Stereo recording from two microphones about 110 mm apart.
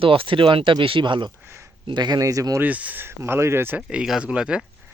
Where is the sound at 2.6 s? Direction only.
15° right (ahead or behind).